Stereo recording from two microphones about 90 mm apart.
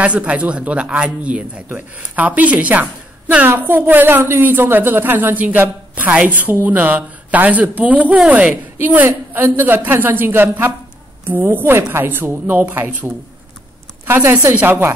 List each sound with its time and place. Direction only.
0.0 s a woman's voice: 15° right (ahead or behind)